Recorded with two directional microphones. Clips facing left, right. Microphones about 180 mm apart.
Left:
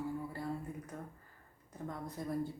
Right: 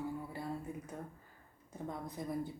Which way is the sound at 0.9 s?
20° right (ahead or behind).